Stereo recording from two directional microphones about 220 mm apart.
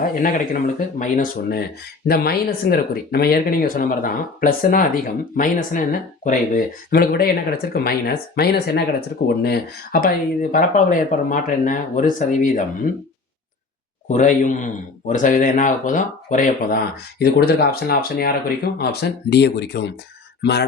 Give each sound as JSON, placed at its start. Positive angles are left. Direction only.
{"t": 0.0, "sound": "a man's voice", "side_deg": 35}
{"t": 14.1, "sound": "a man's voice", "side_deg": 35}